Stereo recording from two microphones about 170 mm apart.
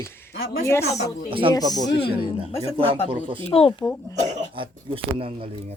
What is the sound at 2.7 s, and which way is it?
Speech, 35° right (ahead or behind).